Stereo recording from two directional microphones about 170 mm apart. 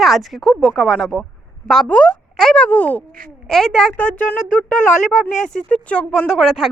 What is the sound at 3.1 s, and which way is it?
Speech, 55° right (ahead or behind).